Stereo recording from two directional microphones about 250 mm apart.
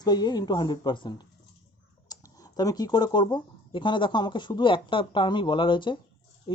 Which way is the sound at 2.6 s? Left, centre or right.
Centre.